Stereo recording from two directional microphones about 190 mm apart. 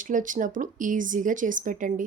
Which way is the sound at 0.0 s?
45° right (ahead or behind).